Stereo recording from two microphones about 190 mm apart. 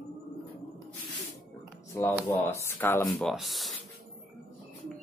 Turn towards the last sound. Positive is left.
turn(degrees=0)  # may be behind; listen again after turning